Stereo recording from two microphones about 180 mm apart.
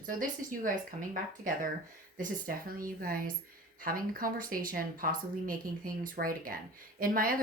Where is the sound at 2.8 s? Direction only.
50° right (ahead or behind).